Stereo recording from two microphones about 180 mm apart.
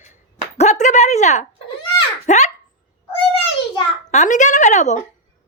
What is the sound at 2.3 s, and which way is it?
Speech, 40° left (ahead or behind).